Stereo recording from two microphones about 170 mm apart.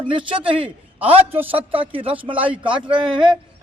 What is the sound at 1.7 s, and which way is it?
Speech, 30° right (ahead or behind).